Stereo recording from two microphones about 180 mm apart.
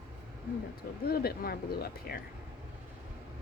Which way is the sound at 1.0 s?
60° left (ahead or behind).